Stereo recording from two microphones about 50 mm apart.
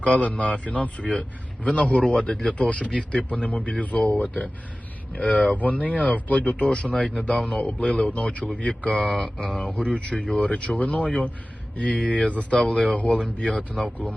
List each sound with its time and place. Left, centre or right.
0.0 s speech: centre
13.8 s speech: left